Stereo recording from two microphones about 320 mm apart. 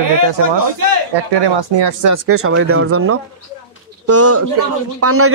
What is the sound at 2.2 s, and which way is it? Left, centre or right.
A man's voice, right.